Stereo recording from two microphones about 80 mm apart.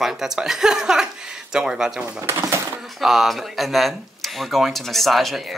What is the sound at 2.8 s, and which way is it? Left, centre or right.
Speech, centre.